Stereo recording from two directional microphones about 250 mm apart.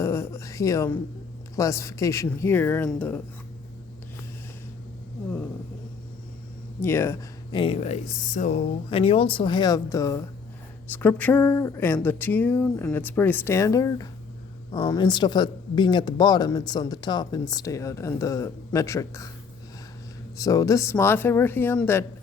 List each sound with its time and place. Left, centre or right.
0.0 s speech: centre
6.8 s speech: centre
7.6 s speech: left
20.3 s speech: centre